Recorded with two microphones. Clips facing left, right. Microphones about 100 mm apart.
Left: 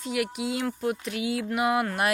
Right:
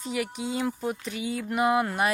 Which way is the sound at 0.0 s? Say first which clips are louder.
Left 2 dB; centre (ahead or behind).